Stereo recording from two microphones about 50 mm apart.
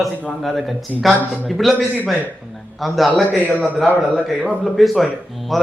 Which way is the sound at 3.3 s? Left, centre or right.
Left.